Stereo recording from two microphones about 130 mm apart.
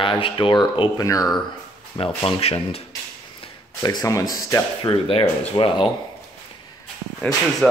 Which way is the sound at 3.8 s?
30° left (ahead or behind).